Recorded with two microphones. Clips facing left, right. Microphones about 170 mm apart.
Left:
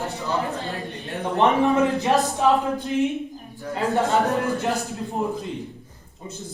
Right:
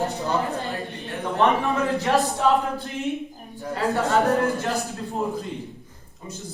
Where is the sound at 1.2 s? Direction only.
20° left (ahead or behind).